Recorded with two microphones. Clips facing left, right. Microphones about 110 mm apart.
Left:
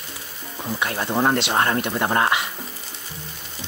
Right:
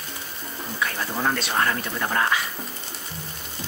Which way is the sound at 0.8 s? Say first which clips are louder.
Left 5 dB; 30° left (ahead or behind).